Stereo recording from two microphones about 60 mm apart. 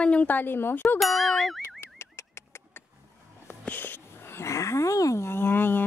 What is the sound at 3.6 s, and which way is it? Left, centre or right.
Wheeze, left.